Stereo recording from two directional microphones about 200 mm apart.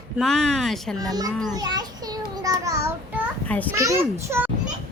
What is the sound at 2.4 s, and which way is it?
Child singing, 15° right (ahead or behind).